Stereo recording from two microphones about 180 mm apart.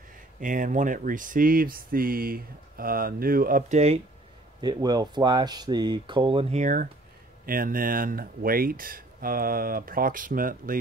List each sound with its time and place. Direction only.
0.4 s speech: 45° right (ahead or behind)
4.6 s speech: 20° right (ahead or behind); by 10.8 s 50° right (ahead or behind)